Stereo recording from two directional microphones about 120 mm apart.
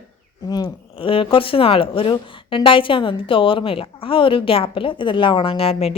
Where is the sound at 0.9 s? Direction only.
50° left (ahead or behind).